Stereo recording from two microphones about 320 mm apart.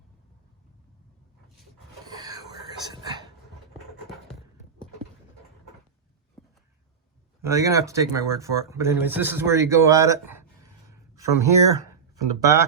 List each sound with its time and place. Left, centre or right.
2.0 s whispering: centre
7.4 s speech: centre
11.1 s a sound: centre
12.1 s speech: centre